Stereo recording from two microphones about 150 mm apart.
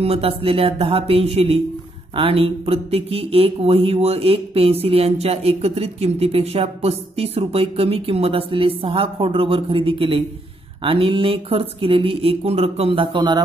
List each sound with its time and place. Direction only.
0.0 s speech: 40° right (ahead or behind)